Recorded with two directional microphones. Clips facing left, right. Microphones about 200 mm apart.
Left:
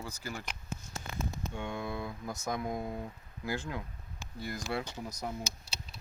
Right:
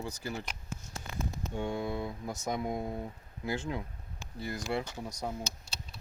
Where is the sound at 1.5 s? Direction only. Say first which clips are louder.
Right 5 dB; 35° right (ahead or behind).